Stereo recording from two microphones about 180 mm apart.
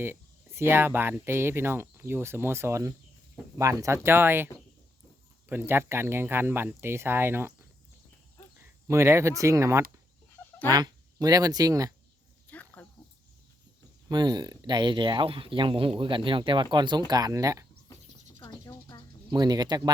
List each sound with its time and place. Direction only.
0.0 s speech: 15° right (ahead or behind)
5.5 s speech: 10° right (ahead or behind)
8.9 s speech: 15° right (ahead or behind)
12.5 s a sound: 10° left (ahead or behind)
14.1 s speech: 25° right (ahead or behind)
18.4 s a sound: 15° left (ahead or behind)
19.3 s speech: 20° right (ahead or behind)